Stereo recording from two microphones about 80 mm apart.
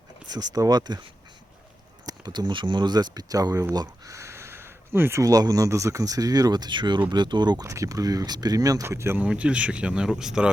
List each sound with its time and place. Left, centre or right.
0.3 s speech: right
2.0 s speech: right
5.2 s speech: right
7.7 s speech: right
8.8 s speech: right
9.1 s speech: centre